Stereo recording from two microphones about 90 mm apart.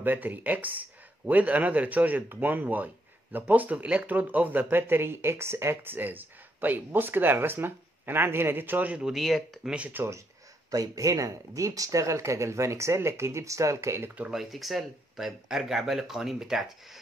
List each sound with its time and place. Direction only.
0.0 s speech: 20° right (ahead or behind)
9.0 s speech: centre (ahead or behind)
9.8 s speech: 20° right (ahead or behind)
10.7 s speech: 40° right (ahead or behind)
14.3 s speech: centre (ahead or behind)